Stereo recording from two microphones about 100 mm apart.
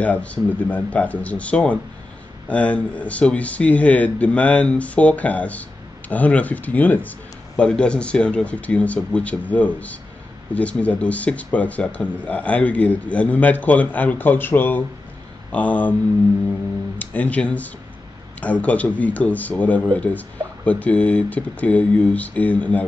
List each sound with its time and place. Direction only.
0.0 s speech: 15° left (ahead or behind)
17.0 s speech: 15° left (ahead or behind)